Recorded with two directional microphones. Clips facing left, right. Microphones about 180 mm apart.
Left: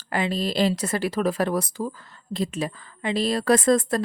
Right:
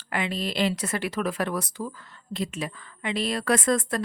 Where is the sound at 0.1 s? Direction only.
35° left (ahead or behind).